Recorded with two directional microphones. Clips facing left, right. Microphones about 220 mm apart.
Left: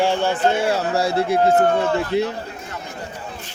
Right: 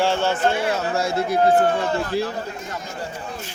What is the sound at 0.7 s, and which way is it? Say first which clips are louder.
Speech: left 3 dB; 35° left (ahead or behind).